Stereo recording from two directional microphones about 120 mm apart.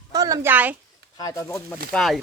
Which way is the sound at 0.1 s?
35° right (ahead or behind).